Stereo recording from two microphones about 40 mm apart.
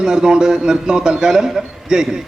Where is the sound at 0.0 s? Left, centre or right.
Centre.